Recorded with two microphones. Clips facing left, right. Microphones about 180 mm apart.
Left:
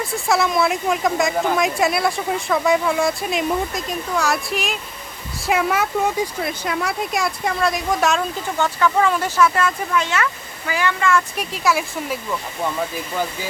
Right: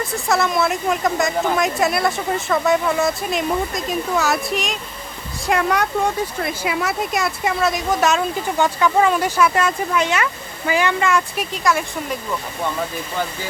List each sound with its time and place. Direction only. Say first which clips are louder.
0.0 s speech: even; centre (ahead or behind)
6.5 s speech: right 1 dB; 5° right (ahead or behind)
8.5 s speech: right 1 dB; 15° right (ahead or behind)
11.3 s speech: right 1 dB; 5° left (ahead or behind)